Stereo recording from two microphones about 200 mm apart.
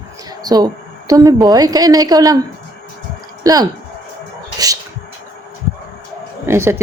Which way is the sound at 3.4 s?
20° right (ahead or behind).